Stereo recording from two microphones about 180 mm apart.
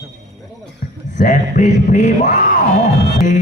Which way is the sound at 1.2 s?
45° left (ahead or behind).